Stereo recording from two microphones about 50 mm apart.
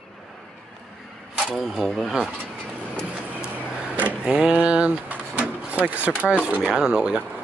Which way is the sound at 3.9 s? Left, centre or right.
Right.